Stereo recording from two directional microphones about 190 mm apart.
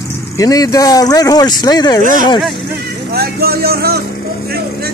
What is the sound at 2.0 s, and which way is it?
Speech, 45° right (ahead or behind).